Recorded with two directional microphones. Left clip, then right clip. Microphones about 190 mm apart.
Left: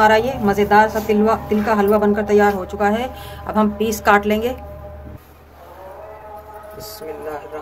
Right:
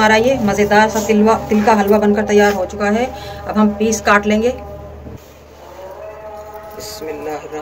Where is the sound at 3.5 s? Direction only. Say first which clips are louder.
Right 3 dB; 50° left (ahead or behind).